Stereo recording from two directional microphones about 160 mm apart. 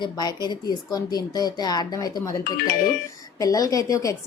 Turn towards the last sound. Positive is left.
turn(degrees=20)  # may be behind; listen again after turning